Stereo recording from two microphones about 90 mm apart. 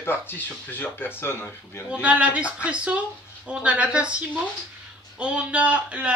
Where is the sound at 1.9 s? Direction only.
15° right (ahead or behind).